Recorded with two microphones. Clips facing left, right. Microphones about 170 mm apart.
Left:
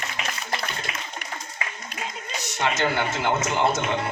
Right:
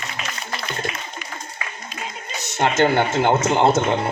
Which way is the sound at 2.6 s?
55° right (ahead or behind).